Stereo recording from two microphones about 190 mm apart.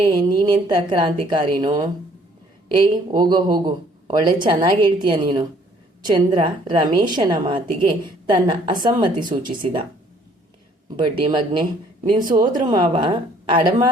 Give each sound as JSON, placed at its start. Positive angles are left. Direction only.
{"t": 0.3, "sound": "speech", "side_deg": -25}
{"t": 10.9, "sound": "speech", "side_deg": -25}